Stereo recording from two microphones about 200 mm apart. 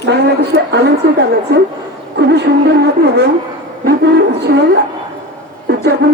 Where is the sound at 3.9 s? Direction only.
55° right (ahead or behind).